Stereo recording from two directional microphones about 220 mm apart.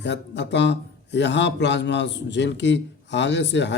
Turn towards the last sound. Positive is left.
turn(degrees=50)  # may be behind; listen again after turning